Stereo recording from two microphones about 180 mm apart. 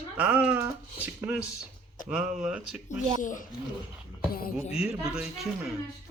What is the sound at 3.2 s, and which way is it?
Speech, 45° left (ahead or behind).